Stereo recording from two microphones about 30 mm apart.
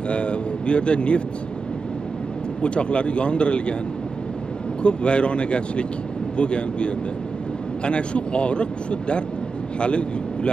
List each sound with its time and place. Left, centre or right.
0.1 s speech: left
2.6 s a man's voice: left
4.8 s a man's voice: left
9.8 s speech: left